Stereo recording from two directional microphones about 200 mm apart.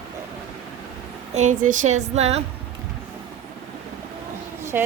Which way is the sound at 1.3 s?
35° right (ahead or behind).